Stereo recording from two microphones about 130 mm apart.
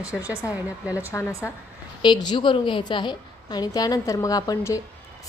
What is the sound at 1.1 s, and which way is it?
Speech, 20° left (ahead or behind).